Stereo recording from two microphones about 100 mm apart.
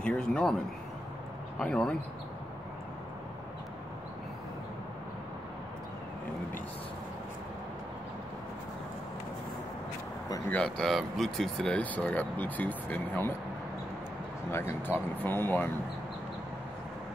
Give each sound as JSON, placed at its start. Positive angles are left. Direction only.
{"t": 0.0, "sound": "a sound", "side_deg": 10}
{"t": 1.6, "sound": "speech", "side_deg": 10}
{"t": 10.5, "sound": "speech", "side_deg": 5}
{"t": 14.5, "sound": "speech", "side_deg": 25}